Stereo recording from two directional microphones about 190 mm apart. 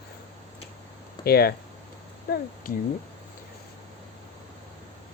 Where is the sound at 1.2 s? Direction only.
55° left (ahead or behind).